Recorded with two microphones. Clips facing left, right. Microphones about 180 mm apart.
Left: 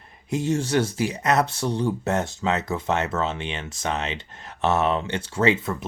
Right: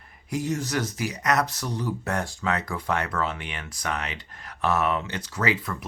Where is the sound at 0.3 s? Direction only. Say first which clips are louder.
Left 4 dB; 25° left (ahead or behind).